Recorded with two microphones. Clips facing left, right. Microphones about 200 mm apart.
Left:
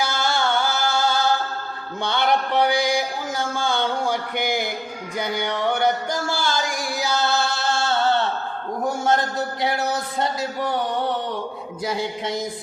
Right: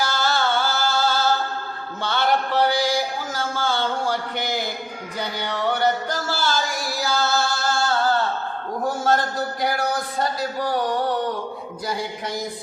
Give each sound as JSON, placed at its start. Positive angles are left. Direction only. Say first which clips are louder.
{"t": 0.2, "sound": "a sound", "louder": "even", "side_deg": 15}
{"t": 2.0, "sound": "music", "louder": "left 1 dB", "side_deg": 20}
{"t": 9.0, "sound": "speech", "louder": "even", "side_deg": 20}
{"t": 11.9, "sound": "speech", "louder": "left 2 dB", "side_deg": 20}